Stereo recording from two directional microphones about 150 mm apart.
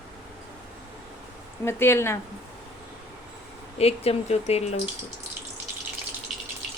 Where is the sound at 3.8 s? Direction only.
40° left (ahead or behind).